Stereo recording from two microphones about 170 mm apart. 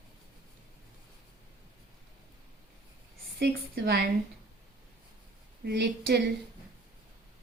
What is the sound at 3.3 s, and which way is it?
Speech, 75° right (ahead or behind).